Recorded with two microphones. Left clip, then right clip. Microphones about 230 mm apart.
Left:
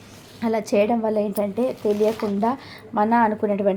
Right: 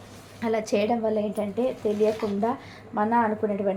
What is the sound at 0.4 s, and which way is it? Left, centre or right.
Speech, left.